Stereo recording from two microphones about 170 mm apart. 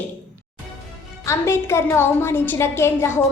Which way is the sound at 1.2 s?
15° left (ahead or behind).